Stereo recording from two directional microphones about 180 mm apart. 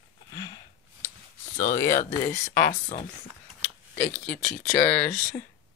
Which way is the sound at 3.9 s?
45° left (ahead or behind).